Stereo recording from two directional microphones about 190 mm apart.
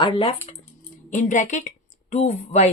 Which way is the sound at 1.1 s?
40° left (ahead or behind).